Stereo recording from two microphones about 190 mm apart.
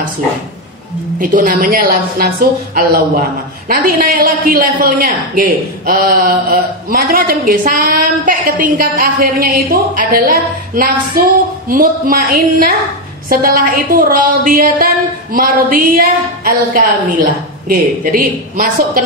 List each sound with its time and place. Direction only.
1.2 s a woman's voice: 45° right (ahead or behind)
3.6 s a woman's voice: 50° right (ahead or behind)